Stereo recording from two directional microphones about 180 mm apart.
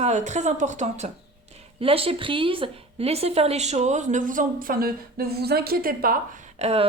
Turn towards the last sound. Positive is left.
turn(degrees=-35)  # may be behind; listen again after turning